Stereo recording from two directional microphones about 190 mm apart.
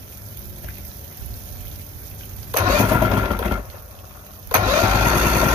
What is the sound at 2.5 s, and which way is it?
Engine starting, 20° right (ahead or behind).